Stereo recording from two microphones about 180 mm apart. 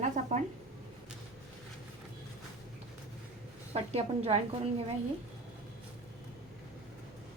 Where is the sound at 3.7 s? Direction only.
35° right (ahead or behind).